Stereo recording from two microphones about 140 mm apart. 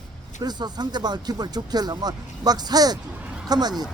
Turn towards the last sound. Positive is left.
turn(degrees=-30)  # may be behind; listen again after turning